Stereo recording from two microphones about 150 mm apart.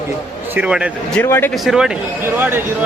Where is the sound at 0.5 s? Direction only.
10° right (ahead or behind).